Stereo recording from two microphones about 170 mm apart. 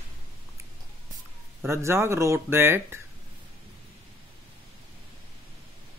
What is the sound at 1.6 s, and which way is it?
Speech, 15° right (ahead or behind).